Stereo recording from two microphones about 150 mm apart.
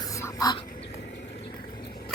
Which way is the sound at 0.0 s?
20° left (ahead or behind).